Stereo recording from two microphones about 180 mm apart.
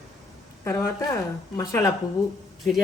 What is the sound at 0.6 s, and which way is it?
A woman's voice, 15° left (ahead or behind).